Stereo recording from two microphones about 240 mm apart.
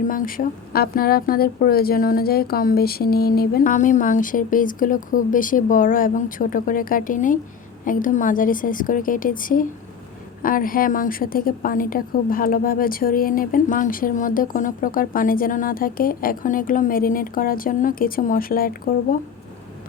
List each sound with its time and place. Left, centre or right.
0.1 s a woman's voice: left